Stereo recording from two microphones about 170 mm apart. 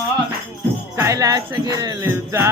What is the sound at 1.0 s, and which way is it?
Music, 20° right (ahead or behind).